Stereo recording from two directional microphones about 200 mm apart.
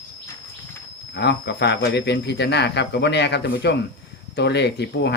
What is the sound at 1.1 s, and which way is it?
Speech, 60° left (ahead or behind).